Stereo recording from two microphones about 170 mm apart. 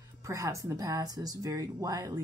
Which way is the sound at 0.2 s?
20° right (ahead or behind).